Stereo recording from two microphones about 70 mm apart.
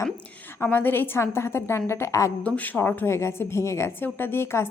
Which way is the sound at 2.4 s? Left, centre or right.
Left.